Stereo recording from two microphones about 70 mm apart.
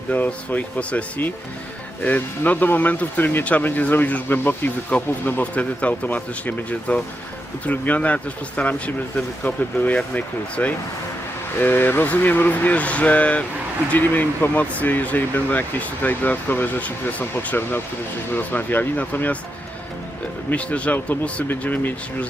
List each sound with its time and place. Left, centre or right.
0.1 s speech: left
20.5 s speech: centre